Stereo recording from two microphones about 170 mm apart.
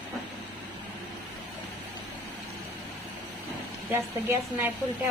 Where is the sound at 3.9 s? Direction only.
15° right (ahead or behind).